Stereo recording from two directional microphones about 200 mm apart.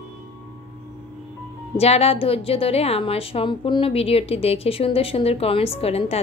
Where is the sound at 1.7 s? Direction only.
30° left (ahead or behind).